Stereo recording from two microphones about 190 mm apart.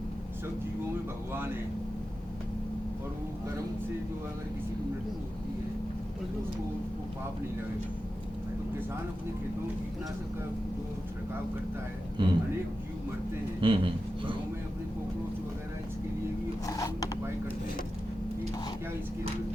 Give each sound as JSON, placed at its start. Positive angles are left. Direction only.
{"t": 12.2, "sound": "speech", "side_deg": -25}
{"t": 13.6, "sound": "speech", "side_deg": -25}
{"t": 16.6, "sound": "a sound", "side_deg": 20}